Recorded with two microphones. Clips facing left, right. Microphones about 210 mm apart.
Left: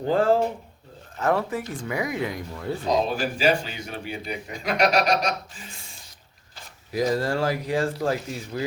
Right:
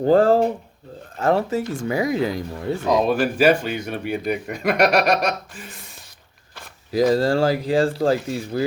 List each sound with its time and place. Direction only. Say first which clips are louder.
0.0 s speech: right 5 dB; 40° right (ahead or behind)
2.8 s speech: right 5 dB; 60° right (ahead or behind)
7.1 s speech: right 5 dB; 30° right (ahead or behind)